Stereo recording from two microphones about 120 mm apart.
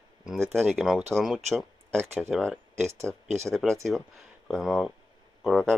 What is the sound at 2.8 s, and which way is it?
Speech, 20° right (ahead or behind).